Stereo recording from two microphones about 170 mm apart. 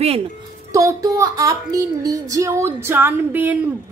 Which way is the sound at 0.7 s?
20° right (ahead or behind).